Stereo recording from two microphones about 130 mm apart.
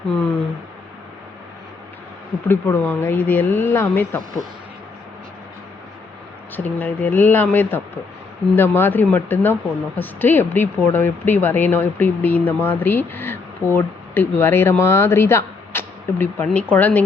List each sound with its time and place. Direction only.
2.5 s speech: 15° left (ahead or behind)
6.6 s speech: 10° left (ahead or behind)